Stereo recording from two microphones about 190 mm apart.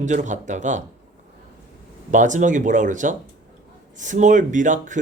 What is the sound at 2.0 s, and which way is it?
Speech, 40° right (ahead or behind).